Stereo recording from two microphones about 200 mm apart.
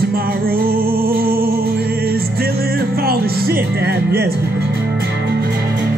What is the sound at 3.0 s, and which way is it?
Music, 50° right (ahead or behind).